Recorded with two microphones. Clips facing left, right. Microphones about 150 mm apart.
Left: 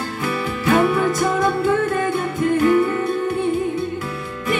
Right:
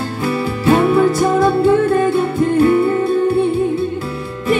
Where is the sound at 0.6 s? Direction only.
30° right (ahead or behind).